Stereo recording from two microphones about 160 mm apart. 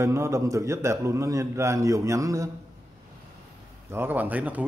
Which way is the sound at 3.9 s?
15° right (ahead or behind).